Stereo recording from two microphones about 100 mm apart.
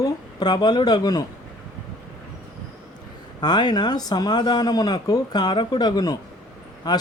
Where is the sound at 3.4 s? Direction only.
45° left (ahead or behind).